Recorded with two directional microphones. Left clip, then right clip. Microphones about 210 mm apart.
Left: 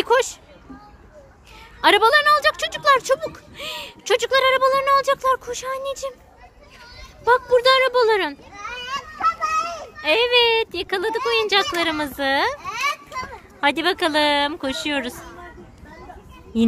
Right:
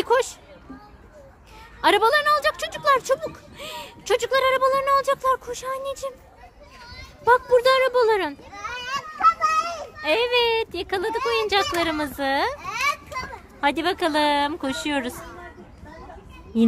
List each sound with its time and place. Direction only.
0.0 s a sound: 5° left (ahead or behind)
1.8 s a woman's voice: 5° left (ahead or behind)
7.2 s a woman's voice: 5° right (ahead or behind)
8.8 s a sound: 30° right (ahead or behind)
10.0 s a woman's voice: centre (ahead or behind)
13.6 s a woman's voice: centre (ahead or behind)
16.5 s a woman's voice: centre (ahead or behind)